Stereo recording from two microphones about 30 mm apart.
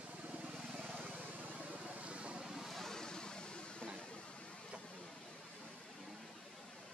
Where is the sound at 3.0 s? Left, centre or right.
Left.